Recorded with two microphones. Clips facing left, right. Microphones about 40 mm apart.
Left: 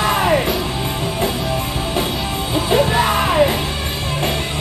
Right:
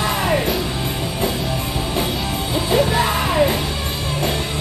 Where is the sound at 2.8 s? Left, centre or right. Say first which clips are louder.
Left 2 dB; centre.